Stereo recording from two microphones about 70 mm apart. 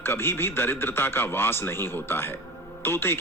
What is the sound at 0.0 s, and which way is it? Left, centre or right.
Speech, left.